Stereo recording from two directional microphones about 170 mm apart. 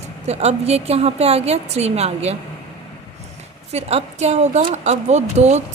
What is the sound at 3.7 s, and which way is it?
A woman's voice, 40° right (ahead or behind).